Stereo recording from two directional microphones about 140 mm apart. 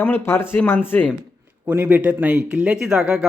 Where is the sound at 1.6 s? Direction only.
15° right (ahead or behind).